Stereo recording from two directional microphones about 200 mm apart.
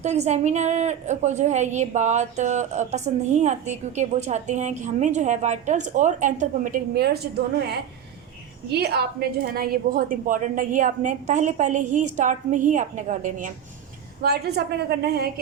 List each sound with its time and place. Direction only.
0.0 s a woman's voice: 35° right (ahead or behind)
14.2 s a woman's voice: 55° right (ahead or behind)